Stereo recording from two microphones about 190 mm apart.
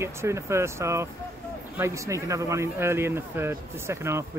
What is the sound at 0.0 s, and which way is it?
Speech, 15° right (ahead or behind).